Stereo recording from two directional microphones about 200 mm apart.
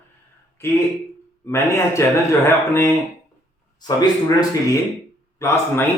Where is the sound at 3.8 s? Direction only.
20° left (ahead or behind).